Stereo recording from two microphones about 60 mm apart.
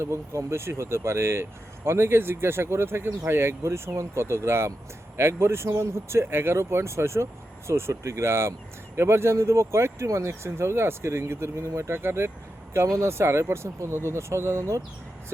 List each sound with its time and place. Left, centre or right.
0.0 s speech: right
12.7 s speech: right